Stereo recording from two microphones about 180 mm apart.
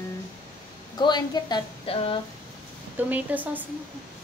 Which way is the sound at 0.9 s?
25° left (ahead or behind).